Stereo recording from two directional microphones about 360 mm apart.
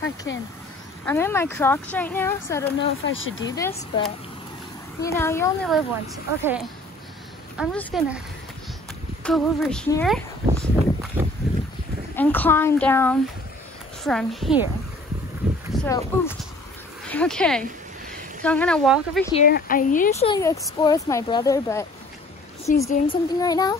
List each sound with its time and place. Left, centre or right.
1.0 s speech: centre
2.8 s speech: left
3.4 s speech: centre
9.2 s speech: centre
15.8 s speech: centre
19.3 s speech: left
22.7 s a woman's voice: left
23.0 s speech: centre